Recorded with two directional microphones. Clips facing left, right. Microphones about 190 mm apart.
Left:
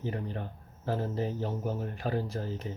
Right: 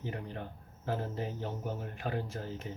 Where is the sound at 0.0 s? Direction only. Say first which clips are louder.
Left 4 dB; 35° left (ahead or behind).